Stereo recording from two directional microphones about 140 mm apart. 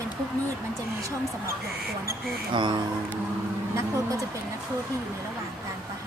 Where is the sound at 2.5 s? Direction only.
35° right (ahead or behind).